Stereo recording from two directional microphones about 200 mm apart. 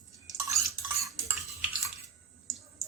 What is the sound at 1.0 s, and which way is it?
Cutlery, 15° right (ahead or behind).